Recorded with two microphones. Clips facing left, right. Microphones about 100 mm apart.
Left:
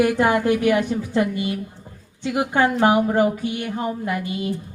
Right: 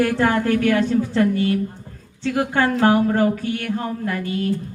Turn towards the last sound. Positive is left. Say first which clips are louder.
# right 2 dB
turn(degrees=15)  # may be behind; listen again after turning